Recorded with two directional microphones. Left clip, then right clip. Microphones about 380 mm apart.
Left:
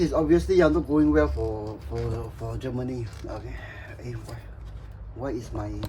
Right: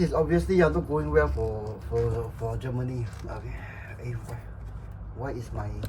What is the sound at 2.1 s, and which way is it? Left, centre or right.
Speech, centre.